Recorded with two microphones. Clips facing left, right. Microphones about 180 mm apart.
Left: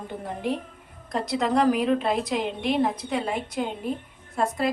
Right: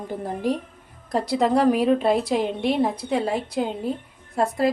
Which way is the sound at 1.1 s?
30° right (ahead or behind).